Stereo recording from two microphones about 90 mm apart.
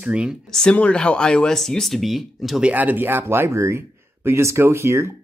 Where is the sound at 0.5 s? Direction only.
5° left (ahead or behind).